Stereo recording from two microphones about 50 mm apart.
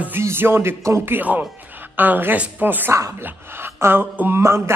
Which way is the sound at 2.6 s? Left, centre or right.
Right.